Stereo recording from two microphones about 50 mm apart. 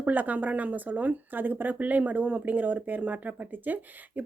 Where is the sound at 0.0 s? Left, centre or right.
Right.